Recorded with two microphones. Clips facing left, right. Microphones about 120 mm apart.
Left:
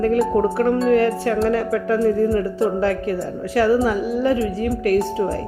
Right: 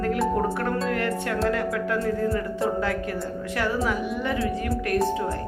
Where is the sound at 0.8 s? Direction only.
30° left (ahead or behind).